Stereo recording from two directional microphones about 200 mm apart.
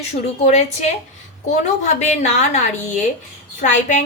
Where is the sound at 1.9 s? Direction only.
35° left (ahead or behind).